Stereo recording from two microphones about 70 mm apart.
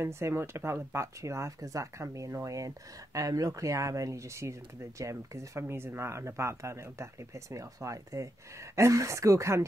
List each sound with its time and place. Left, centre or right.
0.0 s speech: right